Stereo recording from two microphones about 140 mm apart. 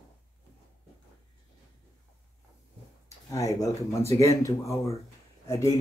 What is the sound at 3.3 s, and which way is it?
Speech, 25° left (ahead or behind).